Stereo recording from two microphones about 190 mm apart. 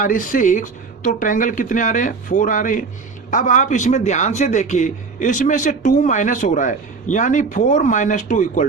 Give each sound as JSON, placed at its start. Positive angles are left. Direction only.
{"t": 0.0, "sound": "speech", "side_deg": 45}